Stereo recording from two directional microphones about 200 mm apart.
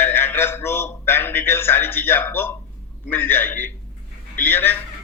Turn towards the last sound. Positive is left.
turn(degrees=10)  # may be behind; listen again after turning